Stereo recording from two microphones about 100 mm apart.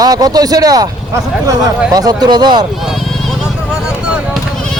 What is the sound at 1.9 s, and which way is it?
Speech, 40° right (ahead or behind).